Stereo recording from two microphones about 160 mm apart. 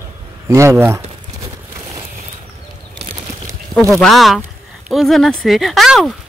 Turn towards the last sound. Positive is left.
turn(degrees=0)  # may be behind; listen again after turning